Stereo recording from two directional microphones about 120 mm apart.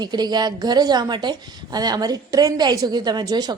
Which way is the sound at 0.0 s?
35° right (ahead or behind).